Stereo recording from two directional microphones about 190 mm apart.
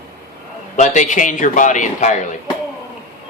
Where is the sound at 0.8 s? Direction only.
40° left (ahead or behind).